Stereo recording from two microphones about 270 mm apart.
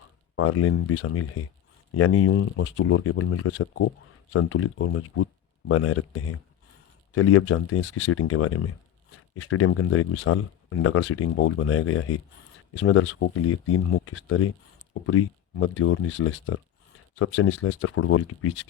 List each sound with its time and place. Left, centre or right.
0.3 s speech: left